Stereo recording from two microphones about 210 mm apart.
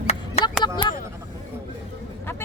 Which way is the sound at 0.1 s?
30° left (ahead or behind).